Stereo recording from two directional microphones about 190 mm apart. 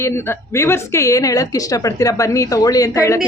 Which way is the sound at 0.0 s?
15° left (ahead or behind).